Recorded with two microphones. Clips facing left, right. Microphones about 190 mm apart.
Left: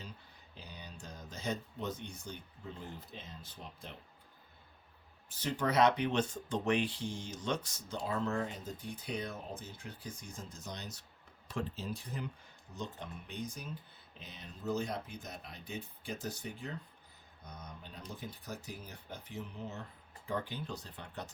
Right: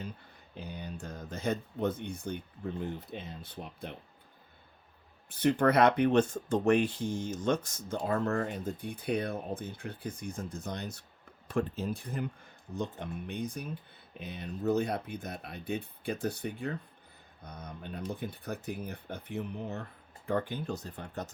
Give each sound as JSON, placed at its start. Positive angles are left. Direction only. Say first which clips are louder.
{"t": 0.5, "sound": "speech", "louder": "right 9 dB", "side_deg": -55}
{"t": 5.3, "sound": "speech", "louder": "right 8 dB", "side_deg": -60}